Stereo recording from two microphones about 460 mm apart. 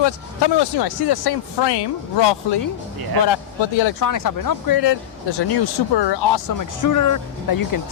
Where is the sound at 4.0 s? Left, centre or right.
Left.